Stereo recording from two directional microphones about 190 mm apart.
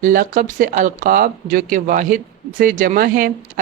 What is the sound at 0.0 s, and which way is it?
Speech, 45° right (ahead or behind).